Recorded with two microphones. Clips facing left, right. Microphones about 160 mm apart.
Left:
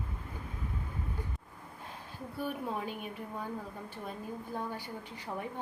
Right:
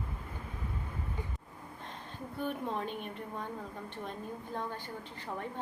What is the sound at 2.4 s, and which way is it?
A woman's voice, 5° left (ahead or behind).